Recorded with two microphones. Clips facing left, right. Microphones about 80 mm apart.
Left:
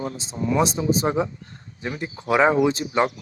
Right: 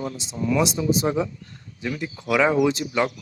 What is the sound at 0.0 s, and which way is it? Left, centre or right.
Speech, left.